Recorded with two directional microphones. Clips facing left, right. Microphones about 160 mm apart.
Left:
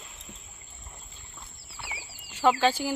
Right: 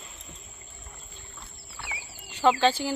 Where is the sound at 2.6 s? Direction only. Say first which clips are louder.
Right 1 dB; 10° left (ahead or behind).